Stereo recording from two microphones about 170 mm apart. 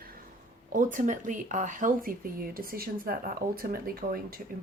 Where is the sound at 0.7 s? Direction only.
50° right (ahead or behind).